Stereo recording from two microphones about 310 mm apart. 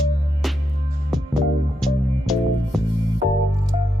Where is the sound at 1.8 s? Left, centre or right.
Centre.